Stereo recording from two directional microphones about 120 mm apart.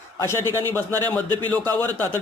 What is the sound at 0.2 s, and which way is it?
Speech, 20° left (ahead or behind).